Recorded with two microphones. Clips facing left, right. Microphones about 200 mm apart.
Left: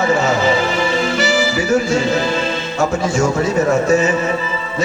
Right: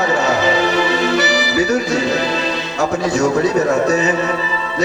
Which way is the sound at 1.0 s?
40° right (ahead or behind).